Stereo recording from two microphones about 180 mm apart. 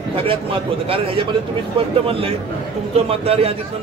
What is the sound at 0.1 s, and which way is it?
A man's voice, 30° right (ahead or behind).